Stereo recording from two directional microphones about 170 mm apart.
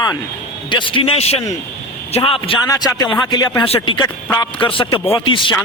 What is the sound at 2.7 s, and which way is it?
A man's voice, 20° left (ahead or behind).